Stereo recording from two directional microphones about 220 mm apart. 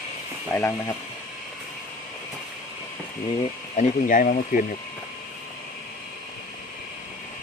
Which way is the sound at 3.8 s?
35° left (ahead or behind).